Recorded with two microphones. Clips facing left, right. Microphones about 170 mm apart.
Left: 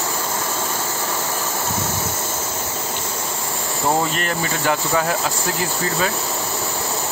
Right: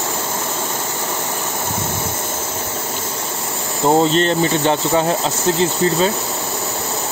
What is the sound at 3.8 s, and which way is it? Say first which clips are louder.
Speech: right 7 dB; 25° right (ahead or behind).